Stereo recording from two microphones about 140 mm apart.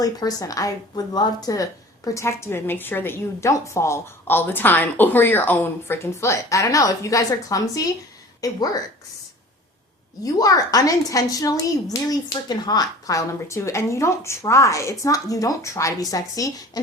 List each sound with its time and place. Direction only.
0.0 s a woman's voice: 25° left (ahead or behind)
10.2 s a woman's voice: 25° left (ahead or behind)